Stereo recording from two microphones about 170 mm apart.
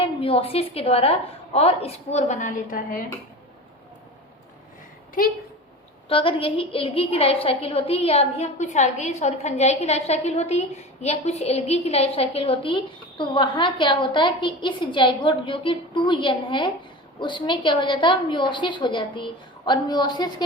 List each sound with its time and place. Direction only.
0.0 s a woman's voice: 35° left (ahead or behind); by 3.1 s 55° left (ahead or behind)
6.1 s a woman's voice: 30° left (ahead or behind)